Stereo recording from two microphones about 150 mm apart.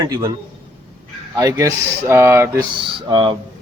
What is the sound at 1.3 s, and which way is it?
Speech, 20° right (ahead or behind).